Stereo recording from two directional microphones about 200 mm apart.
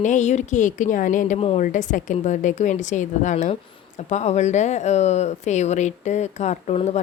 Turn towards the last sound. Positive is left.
turn(degrees=35)  # may be behind; listen again after turning